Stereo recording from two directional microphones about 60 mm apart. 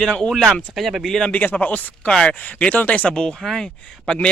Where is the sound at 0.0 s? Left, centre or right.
Centre.